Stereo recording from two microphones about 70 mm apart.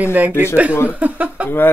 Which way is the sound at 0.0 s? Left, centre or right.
Right.